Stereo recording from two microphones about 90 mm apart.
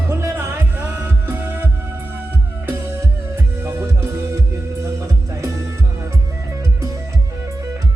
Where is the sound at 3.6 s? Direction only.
30° right (ahead or behind).